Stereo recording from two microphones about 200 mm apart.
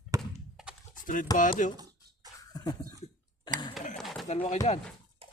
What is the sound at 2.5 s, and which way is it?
Cough, 20° left (ahead or behind).